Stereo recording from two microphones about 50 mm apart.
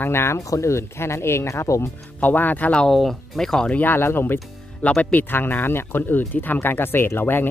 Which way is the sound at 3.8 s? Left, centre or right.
Left.